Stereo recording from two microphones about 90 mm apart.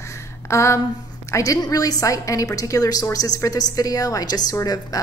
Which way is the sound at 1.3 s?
40° left (ahead or behind).